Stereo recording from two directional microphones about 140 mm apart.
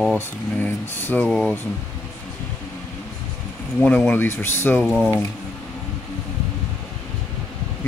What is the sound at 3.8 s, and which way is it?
Speech, 10° left (ahead or behind).